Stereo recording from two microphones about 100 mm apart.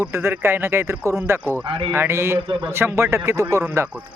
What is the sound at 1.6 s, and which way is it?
Speech, 65° right (ahead or behind).